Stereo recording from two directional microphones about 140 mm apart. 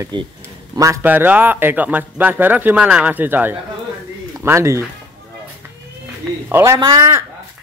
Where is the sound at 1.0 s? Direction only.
10° right (ahead or behind).